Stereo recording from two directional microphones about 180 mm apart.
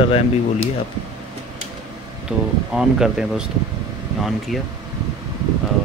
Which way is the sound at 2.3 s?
5° right (ahead or behind).